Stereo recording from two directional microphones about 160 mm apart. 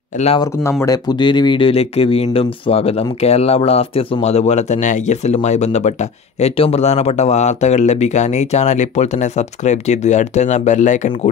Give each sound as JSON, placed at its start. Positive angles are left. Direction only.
{"t": 0.4, "sound": "speech", "side_deg": 20}